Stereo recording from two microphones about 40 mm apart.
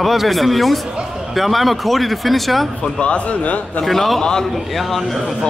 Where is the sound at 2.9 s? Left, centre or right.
Left.